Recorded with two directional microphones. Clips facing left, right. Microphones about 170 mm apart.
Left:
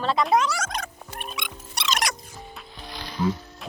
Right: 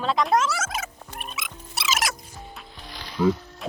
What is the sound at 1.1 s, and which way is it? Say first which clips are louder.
Music: left 3 dB; centre (ahead or behind).